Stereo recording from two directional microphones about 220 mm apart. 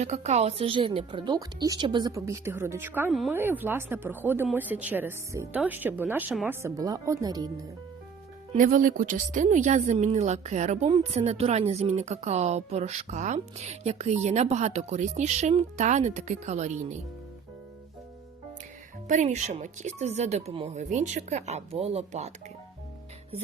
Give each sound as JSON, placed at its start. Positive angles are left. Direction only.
{"t": 0.0, "sound": "speech", "side_deg": -30}
{"t": 8.5, "sound": "a woman's voice", "side_deg": -35}
{"t": 19.0, "sound": "a woman's voice", "side_deg": -35}